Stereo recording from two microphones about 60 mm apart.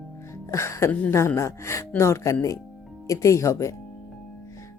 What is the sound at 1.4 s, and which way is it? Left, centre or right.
Speech, left.